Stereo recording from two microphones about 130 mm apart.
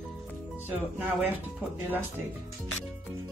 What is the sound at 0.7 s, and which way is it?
Speech, 15° right (ahead or behind).